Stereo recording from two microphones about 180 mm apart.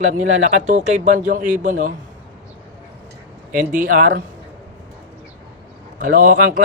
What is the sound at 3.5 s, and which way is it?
Speech, 50° right (ahead or behind).